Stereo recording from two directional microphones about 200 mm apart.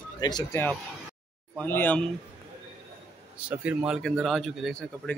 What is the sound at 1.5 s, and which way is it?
Speech, 10° left (ahead or behind).